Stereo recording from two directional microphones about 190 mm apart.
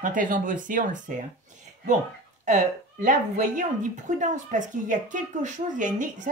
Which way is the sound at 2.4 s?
40° right (ahead or behind).